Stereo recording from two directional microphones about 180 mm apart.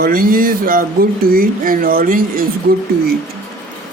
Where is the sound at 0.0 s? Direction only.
50° right (ahead or behind).